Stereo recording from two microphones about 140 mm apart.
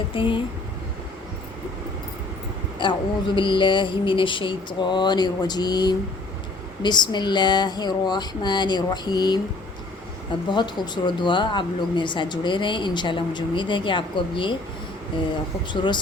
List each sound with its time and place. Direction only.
0.1 s speech: 35° left (ahead or behind)
2.8 s speech: 35° left (ahead or behind)
10.5 s speech: 35° left (ahead or behind)
15.7 s speech: 35° left (ahead or behind)